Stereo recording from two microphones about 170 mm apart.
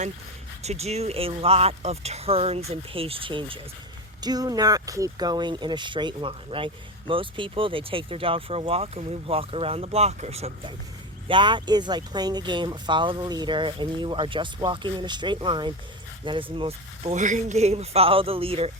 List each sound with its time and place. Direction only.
0.6 s speech: 40° right (ahead or behind)